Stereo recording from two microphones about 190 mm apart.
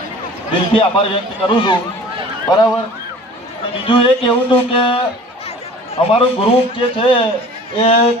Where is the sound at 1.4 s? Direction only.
25° left (ahead or behind).